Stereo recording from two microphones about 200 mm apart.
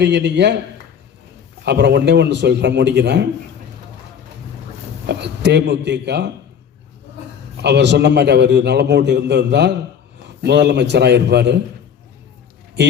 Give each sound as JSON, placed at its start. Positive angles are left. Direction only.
{"t": 0.0, "sound": "a man's voice", "side_deg": -60}
{"t": 1.6, "sound": "a man's voice", "side_deg": -55}
{"t": 5.0, "sound": "a man's voice", "side_deg": -60}
{"t": 7.5, "sound": "a man's voice", "side_deg": -55}